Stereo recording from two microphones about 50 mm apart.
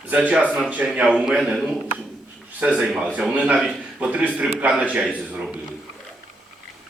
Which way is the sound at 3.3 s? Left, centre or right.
Right.